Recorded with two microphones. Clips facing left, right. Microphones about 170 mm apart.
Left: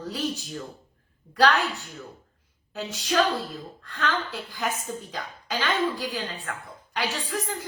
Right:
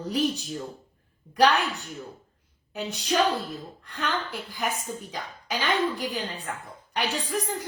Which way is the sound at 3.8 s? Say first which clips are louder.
Left 2 dB; 15° right (ahead or behind).